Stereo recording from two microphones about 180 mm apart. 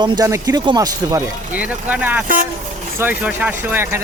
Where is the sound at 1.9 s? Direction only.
10° right (ahead or behind).